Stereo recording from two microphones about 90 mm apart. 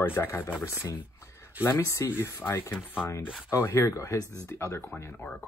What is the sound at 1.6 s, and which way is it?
Speech, 30° left (ahead or behind).